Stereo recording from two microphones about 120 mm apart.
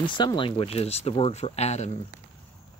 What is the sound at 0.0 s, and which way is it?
Speech, 40° left (ahead or behind).